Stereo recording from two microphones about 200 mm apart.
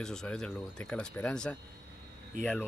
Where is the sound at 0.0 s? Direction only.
5° left (ahead or behind).